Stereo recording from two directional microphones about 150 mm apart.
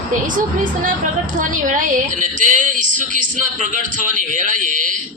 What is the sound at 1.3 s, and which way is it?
A woman's voice, 60° right (ahead or behind).